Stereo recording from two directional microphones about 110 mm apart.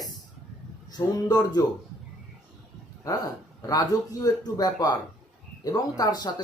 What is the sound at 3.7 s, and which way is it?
A man's voice, 35° left (ahead or behind).